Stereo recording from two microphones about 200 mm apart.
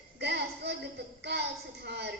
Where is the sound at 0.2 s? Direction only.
55° right (ahead or behind).